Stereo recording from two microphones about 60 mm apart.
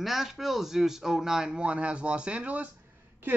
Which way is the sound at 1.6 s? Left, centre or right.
Centre.